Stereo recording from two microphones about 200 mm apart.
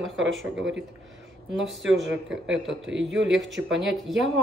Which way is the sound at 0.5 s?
65° right (ahead or behind).